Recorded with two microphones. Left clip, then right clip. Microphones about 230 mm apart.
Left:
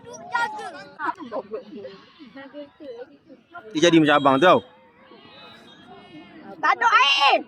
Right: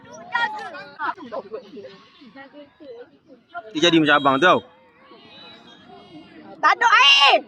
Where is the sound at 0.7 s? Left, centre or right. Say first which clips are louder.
Right 1 dB; right.